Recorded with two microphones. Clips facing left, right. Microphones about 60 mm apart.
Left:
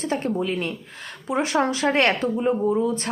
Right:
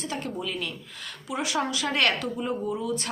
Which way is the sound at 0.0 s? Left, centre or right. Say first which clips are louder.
Left 8 dB; left.